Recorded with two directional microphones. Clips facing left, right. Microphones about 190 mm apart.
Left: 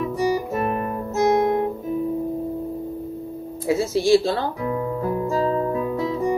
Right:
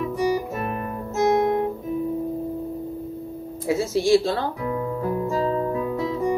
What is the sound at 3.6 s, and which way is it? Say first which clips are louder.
Speech: left 1 dB; 30° left (ahead or behind).